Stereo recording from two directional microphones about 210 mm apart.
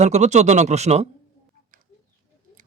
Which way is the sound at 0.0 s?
35° right (ahead or behind).